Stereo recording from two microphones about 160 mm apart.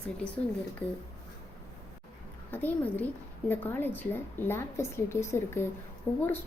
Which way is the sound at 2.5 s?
10° left (ahead or behind).